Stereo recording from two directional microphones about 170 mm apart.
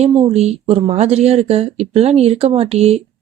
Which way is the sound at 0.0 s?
40° right (ahead or behind).